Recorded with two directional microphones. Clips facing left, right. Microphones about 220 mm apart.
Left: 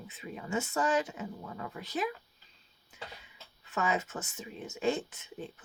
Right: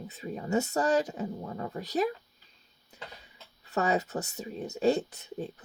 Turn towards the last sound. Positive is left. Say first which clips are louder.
# right 6 dB
turn(degrees=-40)  # may be behind; listen again after turning